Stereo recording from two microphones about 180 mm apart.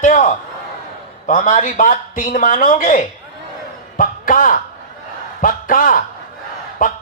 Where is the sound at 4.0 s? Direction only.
50° left (ahead or behind).